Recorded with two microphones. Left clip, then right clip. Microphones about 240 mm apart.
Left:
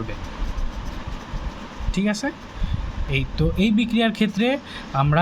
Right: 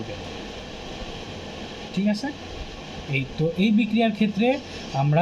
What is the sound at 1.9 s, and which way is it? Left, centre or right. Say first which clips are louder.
Speech: left 3 dB; left.